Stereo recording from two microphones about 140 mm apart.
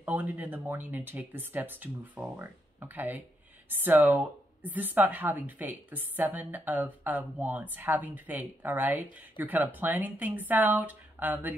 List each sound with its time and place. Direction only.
0.0 s a woman's voice: 10° right (ahead or behind)